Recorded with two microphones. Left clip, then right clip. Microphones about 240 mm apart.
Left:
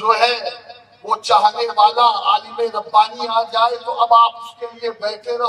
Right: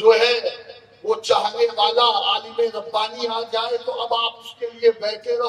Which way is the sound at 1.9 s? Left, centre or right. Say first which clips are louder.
Left 3 dB; left.